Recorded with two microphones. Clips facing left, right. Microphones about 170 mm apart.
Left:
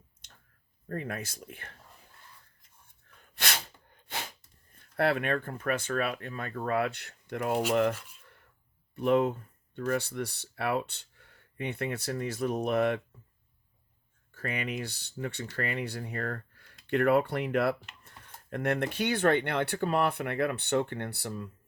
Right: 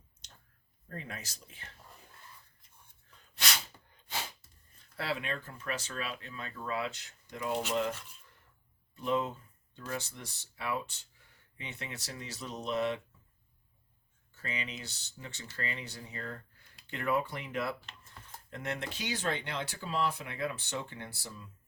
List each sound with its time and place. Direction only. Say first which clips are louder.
0.2 s a sound: right 1 dB; 55° left (ahead or behind)
0.9 s speech: left 8 dB; 55° left (ahead or behind)
3.2 s snort: left 2 dB; 55° left (ahead or behind)
4.7 s speech: left 9 dB; 60° left (ahead or behind)
9.0 s speech: left 7 dB; 60° left (ahead or behind)
14.3 s speech: left 7 dB; 60° left (ahead or behind)